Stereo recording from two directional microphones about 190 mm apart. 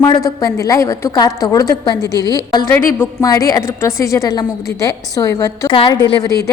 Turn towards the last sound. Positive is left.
turn(degrees=20)  # may be behind; listen again after turning